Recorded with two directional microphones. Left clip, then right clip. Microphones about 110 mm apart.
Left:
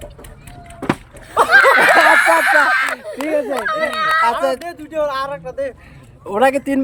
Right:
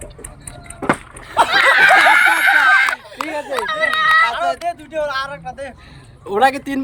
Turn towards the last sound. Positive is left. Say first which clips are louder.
# even
turn(degrees=30)  # may be behind; listen again after turning